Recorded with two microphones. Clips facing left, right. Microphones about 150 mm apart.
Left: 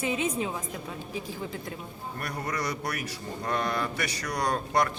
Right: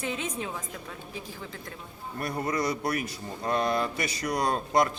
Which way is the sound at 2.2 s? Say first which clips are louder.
Right 4 dB; 25° right (ahead or behind).